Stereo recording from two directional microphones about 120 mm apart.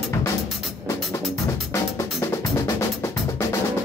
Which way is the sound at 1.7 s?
25° left (ahead or behind).